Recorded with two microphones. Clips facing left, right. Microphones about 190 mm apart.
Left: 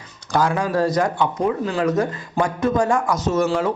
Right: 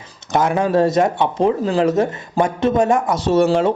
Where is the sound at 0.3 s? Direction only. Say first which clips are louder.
Right 4 dB; 20° right (ahead or behind).